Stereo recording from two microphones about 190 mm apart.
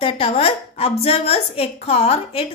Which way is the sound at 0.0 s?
30° left (ahead or behind).